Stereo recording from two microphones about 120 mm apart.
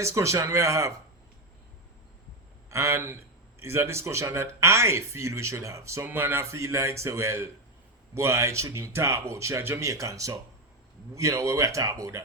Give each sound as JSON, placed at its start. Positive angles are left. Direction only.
{"t": 0.0, "sound": "speech", "side_deg": -25}
{"t": 2.6, "sound": "a man's voice", "side_deg": -20}